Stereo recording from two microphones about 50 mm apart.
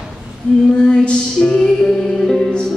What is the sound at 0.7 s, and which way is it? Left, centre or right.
Music, centre.